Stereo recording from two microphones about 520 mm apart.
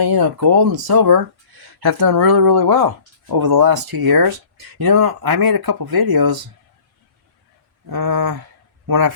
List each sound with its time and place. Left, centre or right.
0.0 s speech: right
7.9 s speech: right